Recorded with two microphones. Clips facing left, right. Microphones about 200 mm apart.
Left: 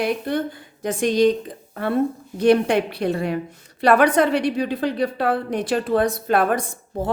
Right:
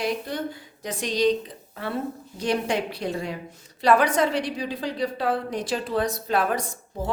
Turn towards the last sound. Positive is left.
turn(degrees=55)  # may be behind; listen again after turning